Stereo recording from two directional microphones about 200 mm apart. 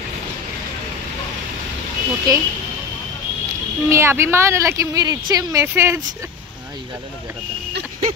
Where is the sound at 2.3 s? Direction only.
20° right (ahead or behind).